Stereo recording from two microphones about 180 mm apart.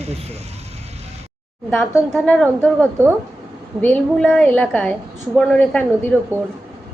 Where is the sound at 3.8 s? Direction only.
5° left (ahead or behind).